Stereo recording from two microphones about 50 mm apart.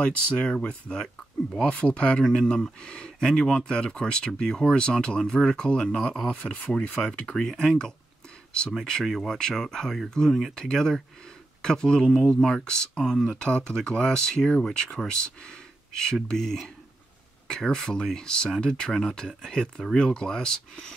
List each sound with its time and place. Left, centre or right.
0.0 s speech: centre